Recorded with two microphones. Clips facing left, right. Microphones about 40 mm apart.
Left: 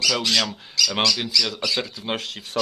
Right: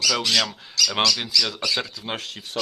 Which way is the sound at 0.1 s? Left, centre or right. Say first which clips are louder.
Even; centre.